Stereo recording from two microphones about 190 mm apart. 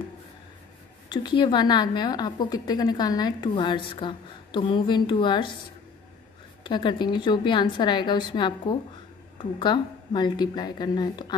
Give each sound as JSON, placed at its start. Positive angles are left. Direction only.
{"t": 1.0, "sound": "a woman's voice", "side_deg": 25}
{"t": 6.6, "sound": "a woman's voice", "side_deg": 25}